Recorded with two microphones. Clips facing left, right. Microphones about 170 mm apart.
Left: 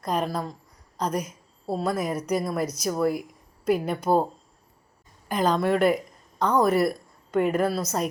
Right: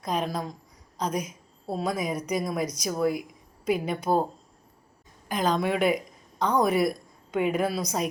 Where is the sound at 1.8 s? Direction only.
5° left (ahead or behind).